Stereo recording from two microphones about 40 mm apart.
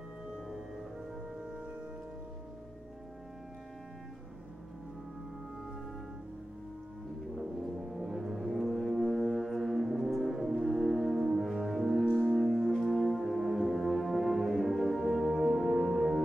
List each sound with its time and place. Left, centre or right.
1.4 s singing bowl: right
7.3 s brass instrument: centre